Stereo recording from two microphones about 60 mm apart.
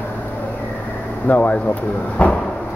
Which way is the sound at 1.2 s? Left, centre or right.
Left.